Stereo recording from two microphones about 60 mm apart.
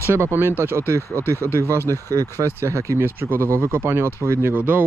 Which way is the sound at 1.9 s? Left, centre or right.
Right.